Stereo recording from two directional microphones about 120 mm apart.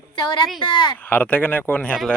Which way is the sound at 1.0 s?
15° left (ahead or behind).